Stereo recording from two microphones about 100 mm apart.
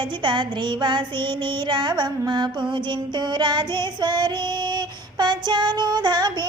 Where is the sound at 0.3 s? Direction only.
50° right (ahead or behind).